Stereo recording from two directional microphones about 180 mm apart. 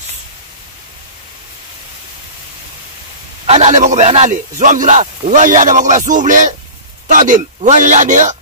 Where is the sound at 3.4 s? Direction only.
40° right (ahead or behind).